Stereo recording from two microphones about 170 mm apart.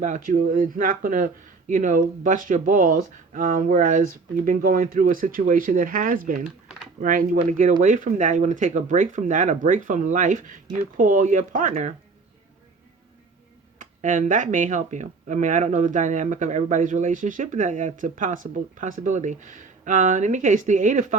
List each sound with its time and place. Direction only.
0.0 s speech: 50° right (ahead or behind)
13.7 s speech: 50° right (ahead or behind)